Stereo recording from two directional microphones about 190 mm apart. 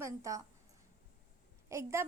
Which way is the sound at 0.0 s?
15° right (ahead or behind).